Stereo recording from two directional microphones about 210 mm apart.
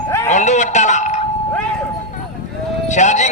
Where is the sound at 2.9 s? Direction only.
35° left (ahead or behind).